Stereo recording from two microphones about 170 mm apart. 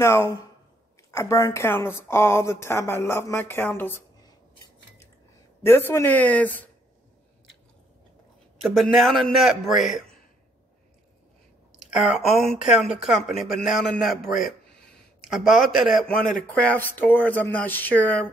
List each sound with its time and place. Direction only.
0.0 s speech: 15° left (ahead or behind)
5.6 s speech: 15° left (ahead or behind)
8.6 s a man's voice: centre (ahead or behind)
11.8 s a man's voice: 5° right (ahead or behind)